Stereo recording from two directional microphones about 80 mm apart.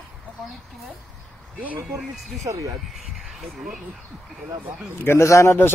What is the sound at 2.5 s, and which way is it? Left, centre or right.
Speech, right.